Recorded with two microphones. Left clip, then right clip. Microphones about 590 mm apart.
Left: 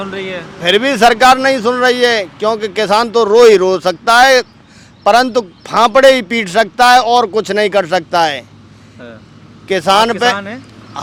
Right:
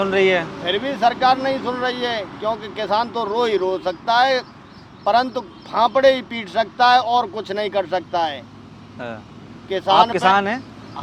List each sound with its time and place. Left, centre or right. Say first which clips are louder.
0.0 s speech: right 5 dB; centre
0.6 s a man's voice: left 14 dB; left
9.0 s speech: right 3 dB; centre
9.6 s a man's voice: left 5 dB; left
10.3 s speech: right 4 dB; centre
11.0 s a sound: left 8 dB; left